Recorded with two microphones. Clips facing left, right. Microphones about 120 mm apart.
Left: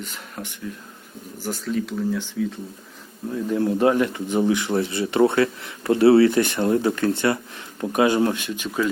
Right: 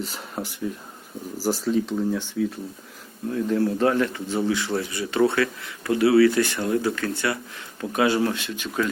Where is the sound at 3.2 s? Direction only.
5° left (ahead or behind).